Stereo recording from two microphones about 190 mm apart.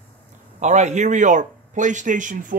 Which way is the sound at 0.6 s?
40° right (ahead or behind).